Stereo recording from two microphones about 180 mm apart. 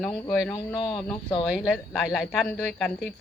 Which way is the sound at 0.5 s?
25° left (ahead or behind).